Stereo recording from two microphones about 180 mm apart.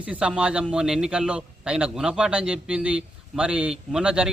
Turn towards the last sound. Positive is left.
turn(degrees=-5)  # may be behind; listen again after turning